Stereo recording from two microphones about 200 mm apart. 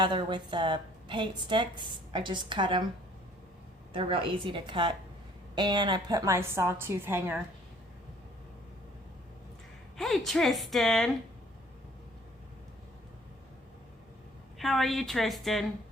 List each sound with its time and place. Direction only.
0.0 s a woman's voice: 25° right (ahead or behind)
3.9 s a woman's voice: 25° right (ahead or behind)
10.0 s a woman's voice: centre (ahead or behind)
14.6 s a woman's voice: centre (ahead or behind)